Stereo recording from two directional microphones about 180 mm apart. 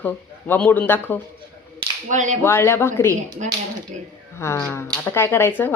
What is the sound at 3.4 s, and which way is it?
Speech, 40° right (ahead or behind).